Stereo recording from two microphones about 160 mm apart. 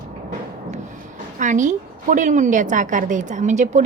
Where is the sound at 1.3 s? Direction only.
50° right (ahead or behind).